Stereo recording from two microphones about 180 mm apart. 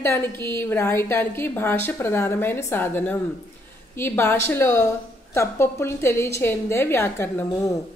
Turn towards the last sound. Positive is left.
turn(degrees=15)  # may be behind; listen again after turning